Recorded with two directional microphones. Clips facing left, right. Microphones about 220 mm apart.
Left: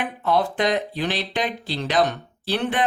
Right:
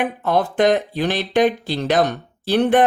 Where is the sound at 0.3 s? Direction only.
50° right (ahead or behind).